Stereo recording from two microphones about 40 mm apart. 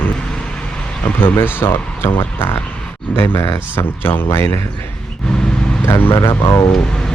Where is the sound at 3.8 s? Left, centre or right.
Left.